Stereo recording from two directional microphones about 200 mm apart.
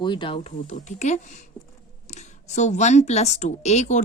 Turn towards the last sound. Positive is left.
turn(degrees=35)  # may be behind; listen again after turning